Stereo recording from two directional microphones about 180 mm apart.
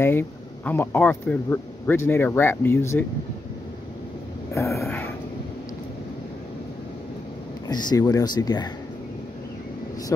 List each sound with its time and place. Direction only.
0.0 s speech: 10° left (ahead or behind)
4.6 s a sound: 15° left (ahead or behind)
7.6 s speech: 20° left (ahead or behind)